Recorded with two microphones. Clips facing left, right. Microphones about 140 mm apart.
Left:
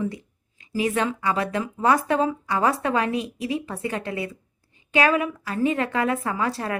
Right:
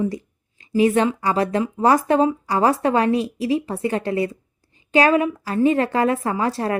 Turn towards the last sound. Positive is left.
turn(degrees=-30)  # may be behind; listen again after turning